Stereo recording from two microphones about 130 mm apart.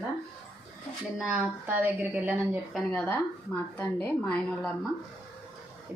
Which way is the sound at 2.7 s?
10° left (ahead or behind).